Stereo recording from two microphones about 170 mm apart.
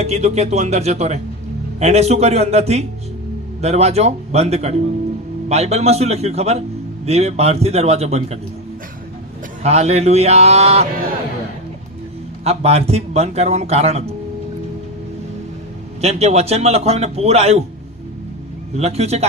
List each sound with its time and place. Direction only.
0.0 s a man's voice: 40° right (ahead or behind)
9.6 s a man's voice: 40° right (ahead or behind)
12.5 s a man's voice: 35° right (ahead or behind)
16.0 s a man's voice: 40° right (ahead or behind)
18.8 s a man's voice: 40° right (ahead or behind)